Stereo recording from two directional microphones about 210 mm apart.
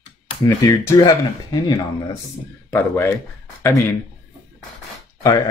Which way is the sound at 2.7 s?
10° left (ahead or behind).